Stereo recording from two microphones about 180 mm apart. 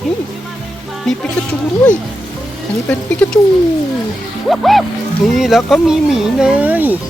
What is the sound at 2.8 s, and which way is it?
Speech, 5° left (ahead or behind).